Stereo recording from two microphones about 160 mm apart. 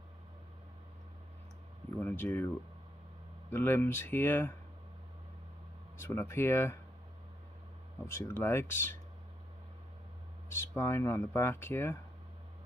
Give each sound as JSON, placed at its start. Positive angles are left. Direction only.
{"t": 2.0, "sound": "speech", "side_deg": 15}
{"t": 5.9, "sound": "speech", "side_deg": 15}
{"t": 8.1, "sound": "speech", "side_deg": 15}
{"t": 10.5, "sound": "speech", "side_deg": 15}